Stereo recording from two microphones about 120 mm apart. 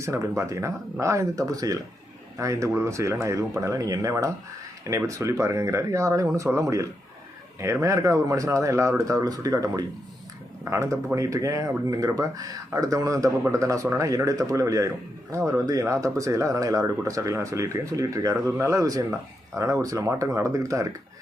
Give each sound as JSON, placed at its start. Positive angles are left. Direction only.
{"t": 0.0, "sound": "speech", "side_deg": -25}